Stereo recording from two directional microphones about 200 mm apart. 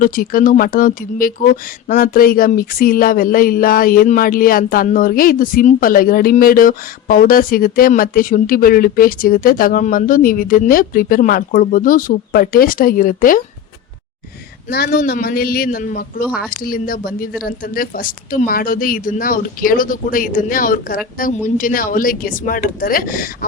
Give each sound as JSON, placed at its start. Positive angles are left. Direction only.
{"t": 0.0, "sound": "speech", "side_deg": 45}
{"t": 14.7, "sound": "speech", "side_deg": 50}